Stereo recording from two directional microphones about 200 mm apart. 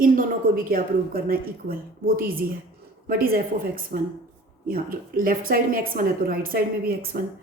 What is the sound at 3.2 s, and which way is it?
A woman's voice, 45° right (ahead or behind).